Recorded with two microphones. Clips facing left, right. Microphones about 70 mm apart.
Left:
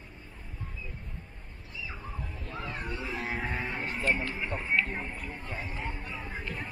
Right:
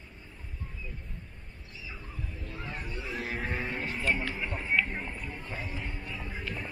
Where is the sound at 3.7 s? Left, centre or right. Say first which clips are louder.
Even; left.